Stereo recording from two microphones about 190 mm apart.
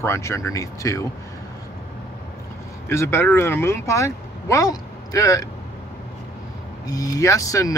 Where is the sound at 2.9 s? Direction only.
15° left (ahead or behind).